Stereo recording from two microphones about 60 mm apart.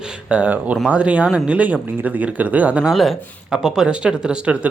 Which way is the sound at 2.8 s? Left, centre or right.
Centre.